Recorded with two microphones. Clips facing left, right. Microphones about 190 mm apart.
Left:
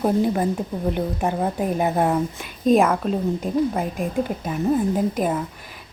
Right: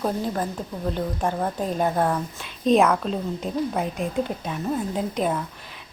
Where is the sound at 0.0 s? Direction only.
15° left (ahead or behind).